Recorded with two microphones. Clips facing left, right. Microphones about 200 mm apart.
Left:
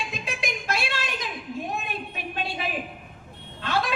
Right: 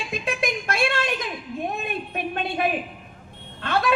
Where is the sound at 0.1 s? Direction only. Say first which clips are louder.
Right 6 dB; 55° right (ahead or behind).